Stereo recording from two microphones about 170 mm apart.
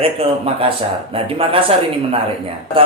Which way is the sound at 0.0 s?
35° right (ahead or behind).